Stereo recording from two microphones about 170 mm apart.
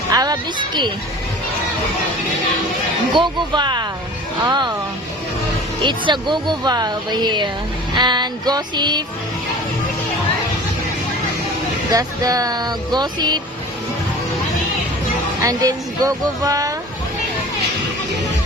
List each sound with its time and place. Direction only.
0.1 s speech: 25° right (ahead or behind)
3.2 s speech: 25° right (ahead or behind)
5.8 s speech: 25° right (ahead or behind)
11.9 s speech: 20° right (ahead or behind)
15.4 s speech: 20° right (ahead or behind)